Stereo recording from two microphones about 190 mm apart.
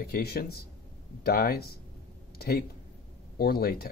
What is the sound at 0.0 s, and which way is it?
Speech, 55° left (ahead or behind).